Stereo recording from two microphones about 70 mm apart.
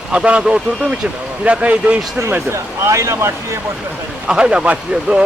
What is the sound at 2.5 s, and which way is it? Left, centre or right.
Speech, right.